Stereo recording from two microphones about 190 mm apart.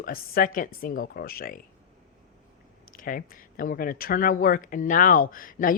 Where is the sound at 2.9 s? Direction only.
45° left (ahead or behind).